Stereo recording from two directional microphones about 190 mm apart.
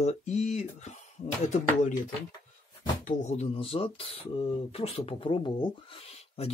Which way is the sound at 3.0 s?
35° left (ahead or behind).